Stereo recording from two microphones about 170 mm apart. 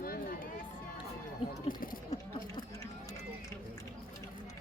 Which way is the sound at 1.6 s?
55° left (ahead or behind).